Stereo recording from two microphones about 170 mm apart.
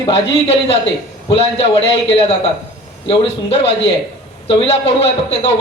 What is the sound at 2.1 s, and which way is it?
A man's voice, 35° left (ahead or behind).